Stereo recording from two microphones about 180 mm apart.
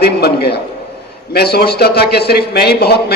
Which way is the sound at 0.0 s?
60° left (ahead or behind).